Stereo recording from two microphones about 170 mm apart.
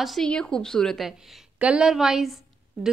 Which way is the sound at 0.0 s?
Centre (ahead or behind).